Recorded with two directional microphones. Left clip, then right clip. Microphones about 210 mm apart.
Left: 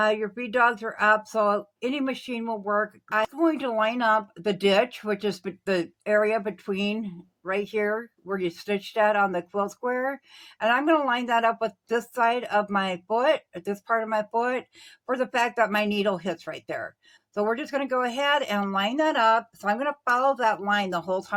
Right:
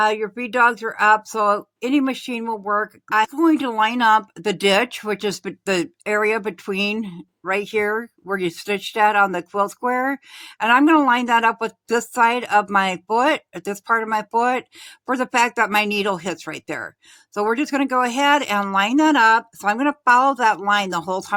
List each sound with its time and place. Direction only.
0.0 s speech: 45° right (ahead or behind)